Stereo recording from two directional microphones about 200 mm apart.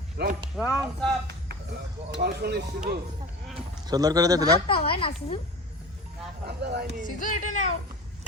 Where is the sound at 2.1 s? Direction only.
55° right (ahead or behind).